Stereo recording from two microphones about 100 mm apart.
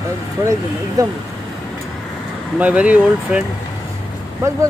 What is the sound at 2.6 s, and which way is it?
Speech, 15° right (ahead or behind).